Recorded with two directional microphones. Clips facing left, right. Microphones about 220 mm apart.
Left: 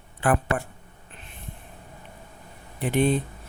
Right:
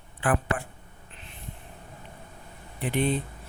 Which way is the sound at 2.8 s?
45° left (ahead or behind).